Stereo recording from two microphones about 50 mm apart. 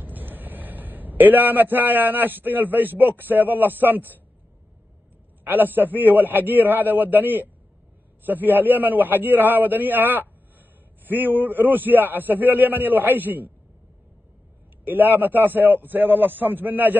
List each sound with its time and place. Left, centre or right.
0.0 s a man's voice: right
5.4 s a man's voice: right
14.9 s a man's voice: right